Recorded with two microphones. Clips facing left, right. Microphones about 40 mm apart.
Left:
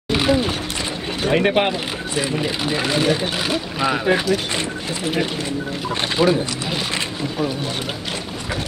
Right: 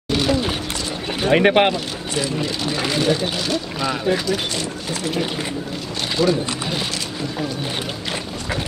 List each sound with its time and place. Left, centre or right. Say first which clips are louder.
0.1 s a sound: left 2 dB; centre
1.3 s speech: right 3 dB; right
2.1 s speech: left 1 dB; left
6.2 s speech: left 1 dB; left